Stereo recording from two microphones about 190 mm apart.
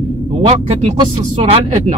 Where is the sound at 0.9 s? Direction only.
30° right (ahead or behind).